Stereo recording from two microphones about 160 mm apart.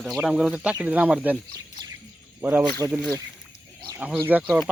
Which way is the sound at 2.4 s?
10° right (ahead or behind).